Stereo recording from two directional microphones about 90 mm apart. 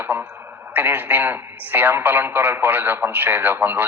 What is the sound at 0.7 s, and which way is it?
Speech, 20° right (ahead or behind).